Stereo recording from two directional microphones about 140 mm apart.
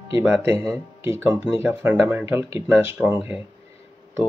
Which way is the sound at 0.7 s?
20° right (ahead or behind).